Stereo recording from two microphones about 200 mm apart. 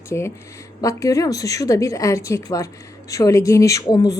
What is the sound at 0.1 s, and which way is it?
A woman's voice, 15° left (ahead or behind).